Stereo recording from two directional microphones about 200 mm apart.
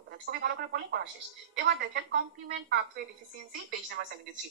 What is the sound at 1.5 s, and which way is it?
Speech, 65° right (ahead or behind).